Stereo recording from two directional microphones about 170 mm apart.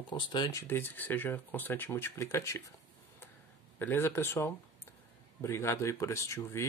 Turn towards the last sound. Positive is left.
turn(degrees=15)  # may be behind; listen again after turning